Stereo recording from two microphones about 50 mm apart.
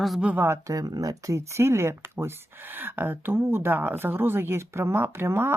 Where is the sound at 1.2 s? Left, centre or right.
Right.